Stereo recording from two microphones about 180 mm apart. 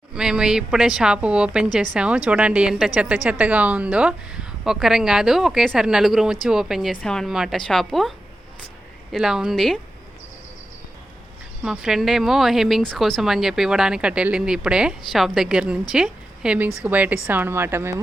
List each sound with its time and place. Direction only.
0.1 s a woman's voice: 5° right (ahead or behind)
9.1 s speech: 5° right (ahead or behind)
11.6 s a woman's voice: 5° right (ahead or behind)